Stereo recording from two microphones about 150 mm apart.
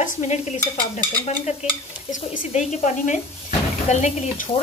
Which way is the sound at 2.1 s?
55° left (ahead or behind).